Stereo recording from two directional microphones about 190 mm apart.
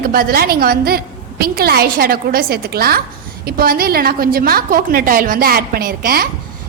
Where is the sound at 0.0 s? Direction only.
50° right (ahead or behind).